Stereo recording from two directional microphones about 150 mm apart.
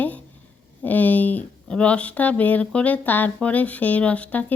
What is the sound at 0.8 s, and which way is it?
A woman's voice, 10° left (ahead or behind).